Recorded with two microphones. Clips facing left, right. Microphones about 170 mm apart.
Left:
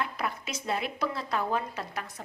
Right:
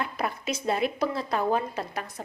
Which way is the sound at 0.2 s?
35° right (ahead or behind).